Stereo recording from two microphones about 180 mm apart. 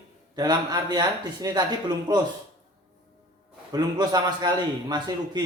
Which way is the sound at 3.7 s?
25° right (ahead or behind).